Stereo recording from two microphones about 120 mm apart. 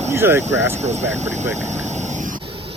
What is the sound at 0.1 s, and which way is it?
Speech, 20° right (ahead or behind).